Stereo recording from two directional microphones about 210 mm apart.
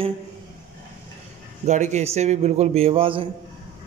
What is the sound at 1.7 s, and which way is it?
A man's voice, 35° right (ahead or behind).